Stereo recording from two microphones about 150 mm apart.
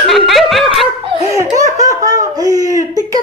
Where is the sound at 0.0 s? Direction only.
Centre (ahead or behind).